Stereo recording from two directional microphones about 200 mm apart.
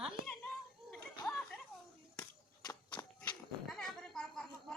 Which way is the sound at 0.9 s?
5° left (ahead or behind).